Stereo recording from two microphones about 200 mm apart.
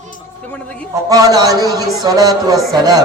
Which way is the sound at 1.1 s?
20° right (ahead or behind).